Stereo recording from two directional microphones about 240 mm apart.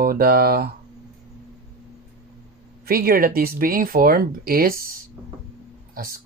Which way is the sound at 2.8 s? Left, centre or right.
Right.